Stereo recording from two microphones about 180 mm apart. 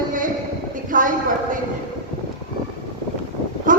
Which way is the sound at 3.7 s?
50° right (ahead or behind).